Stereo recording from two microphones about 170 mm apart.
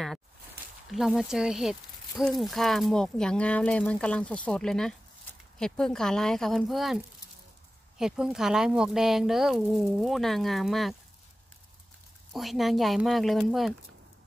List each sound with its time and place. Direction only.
0.9 s speech: 5° right (ahead or behind)
8.0 s speech: 5° right (ahead or behind)
12.3 s speech: centre (ahead or behind)